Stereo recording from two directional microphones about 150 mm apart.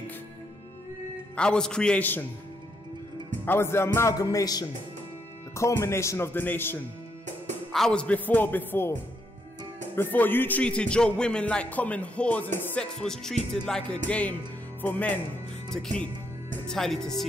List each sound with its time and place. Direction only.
1.3 s a man's voice: 5° left (ahead or behind)
3.4 s a man's voice: 15° left (ahead or behind)
9.9 s a man's voice: 15° left (ahead or behind)
12.5 s music: 5° left (ahead or behind)
14.0 s a man's voice: 10° left (ahead or behind)
15.7 s music: 5° left (ahead or behind)